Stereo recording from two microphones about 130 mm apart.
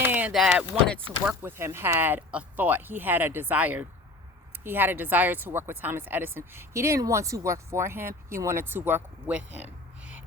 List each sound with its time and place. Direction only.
0.0 s a sound: 15° right (ahead or behind)
0.3 s speech: 5° right (ahead or behind)
1.0 s speech: 15° right (ahead or behind)